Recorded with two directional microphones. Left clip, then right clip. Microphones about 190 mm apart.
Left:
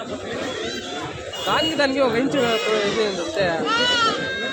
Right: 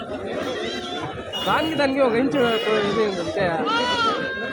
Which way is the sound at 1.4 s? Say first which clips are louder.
Left 1 dB; 25° right (ahead or behind).